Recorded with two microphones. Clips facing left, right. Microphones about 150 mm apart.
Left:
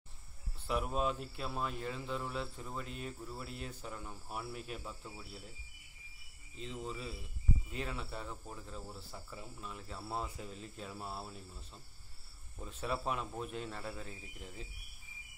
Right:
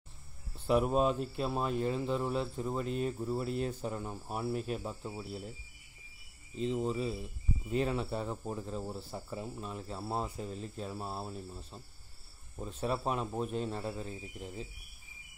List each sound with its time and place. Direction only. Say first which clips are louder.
0.7 s speech: right 7 dB; 30° right (ahead or behind)
6.6 s speech: right 10 dB; 30° right (ahead or behind)